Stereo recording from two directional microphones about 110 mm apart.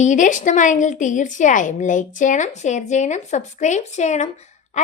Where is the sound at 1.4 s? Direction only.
90° left.